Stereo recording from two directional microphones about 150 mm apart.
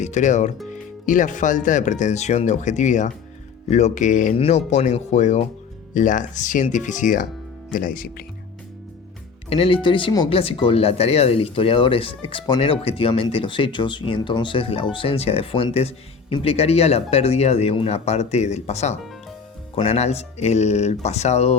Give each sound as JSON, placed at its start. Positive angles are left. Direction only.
{"t": 0.0, "sound": "speech", "side_deg": 50}
{"t": 4.4, "sound": "speech", "side_deg": 45}
{"t": 9.5, "sound": "speech", "side_deg": 40}